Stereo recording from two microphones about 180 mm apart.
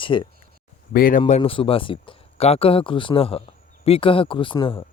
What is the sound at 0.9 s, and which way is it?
Speech, 50° left (ahead or behind).